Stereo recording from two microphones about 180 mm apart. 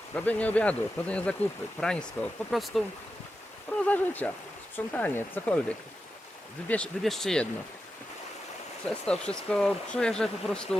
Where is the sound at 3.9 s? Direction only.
10° left (ahead or behind).